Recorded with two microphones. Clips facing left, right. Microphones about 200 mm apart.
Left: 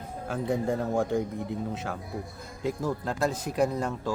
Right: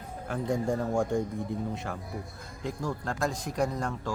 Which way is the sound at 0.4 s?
5° left (ahead or behind).